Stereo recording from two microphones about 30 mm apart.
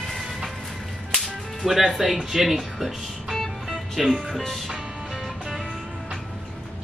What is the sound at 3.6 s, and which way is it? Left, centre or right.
Music, centre.